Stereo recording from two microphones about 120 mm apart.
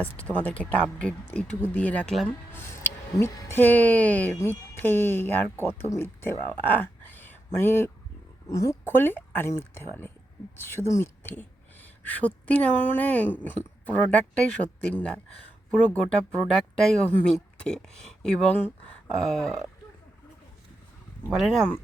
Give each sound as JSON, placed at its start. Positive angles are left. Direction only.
{"t": 0.3, "sound": "speech", "side_deg": 10}
{"t": 6.5, "sound": "a sound", "side_deg": 15}
{"t": 8.4, "sound": "speech", "side_deg": 25}
{"t": 8.9, "sound": "speech", "side_deg": 15}
{"t": 21.2, "sound": "speech", "side_deg": 0}